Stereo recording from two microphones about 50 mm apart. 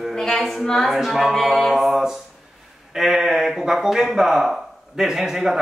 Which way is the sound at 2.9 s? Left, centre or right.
Centre.